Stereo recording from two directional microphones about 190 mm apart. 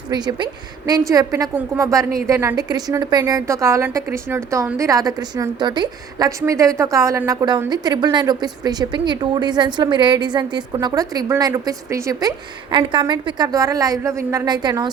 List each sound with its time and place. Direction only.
0.1 s a woman's voice: 20° right (ahead or behind)